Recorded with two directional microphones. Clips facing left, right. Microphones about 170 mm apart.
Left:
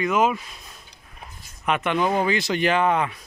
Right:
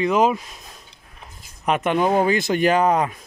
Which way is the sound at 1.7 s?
45° right (ahead or behind).